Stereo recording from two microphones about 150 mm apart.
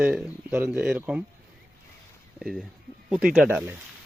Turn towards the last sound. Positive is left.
turn(degrees=-10)  # may be behind; listen again after turning